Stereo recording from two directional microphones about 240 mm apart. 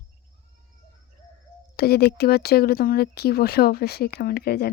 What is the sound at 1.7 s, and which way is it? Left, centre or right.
Speech, left.